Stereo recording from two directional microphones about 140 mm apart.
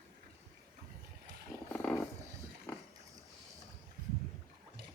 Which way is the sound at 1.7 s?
15° left (ahead or behind).